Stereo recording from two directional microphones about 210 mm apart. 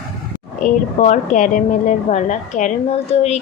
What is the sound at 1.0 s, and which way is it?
Speech, 35° left (ahead or behind).